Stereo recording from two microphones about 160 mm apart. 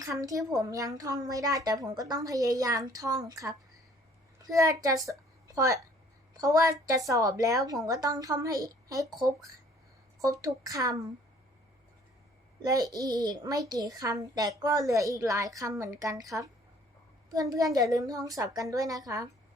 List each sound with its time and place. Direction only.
0.0 s a woman's voice: 20° right (ahead or behind)
10.2 s a woman's voice: 20° right (ahead or behind)
12.6 s a woman's voice: 25° right (ahead or behind)